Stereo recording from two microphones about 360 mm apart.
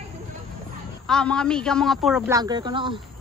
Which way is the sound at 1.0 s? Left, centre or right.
Centre.